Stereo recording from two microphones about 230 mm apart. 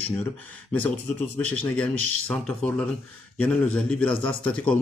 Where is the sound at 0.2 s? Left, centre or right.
Centre.